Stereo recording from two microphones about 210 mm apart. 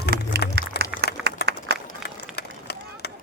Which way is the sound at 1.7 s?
50° right (ahead or behind).